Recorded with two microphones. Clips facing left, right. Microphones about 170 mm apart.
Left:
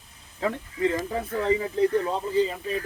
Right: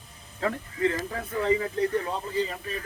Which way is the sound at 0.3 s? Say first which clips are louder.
Left 1 dB; 15° left (ahead or behind).